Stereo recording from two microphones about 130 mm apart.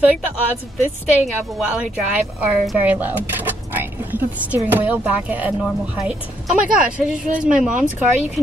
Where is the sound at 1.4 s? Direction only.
Centre (ahead or behind).